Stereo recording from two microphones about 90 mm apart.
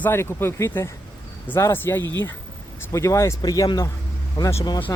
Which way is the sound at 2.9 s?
35° left (ahead or behind).